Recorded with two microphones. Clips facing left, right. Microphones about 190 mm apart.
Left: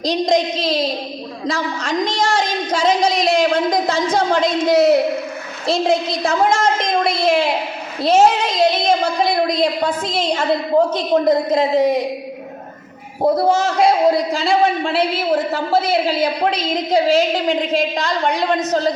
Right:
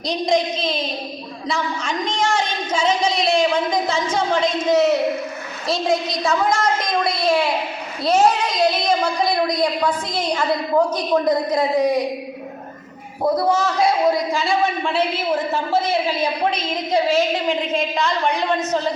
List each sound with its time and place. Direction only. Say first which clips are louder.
2.0 s a woman's voice: left 2 dB; 35° left (ahead or behind)
13.3 s a woman's voice: left 1 dB; 25° left (ahead or behind)